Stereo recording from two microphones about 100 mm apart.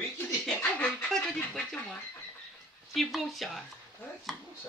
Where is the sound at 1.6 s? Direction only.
5° left (ahead or behind).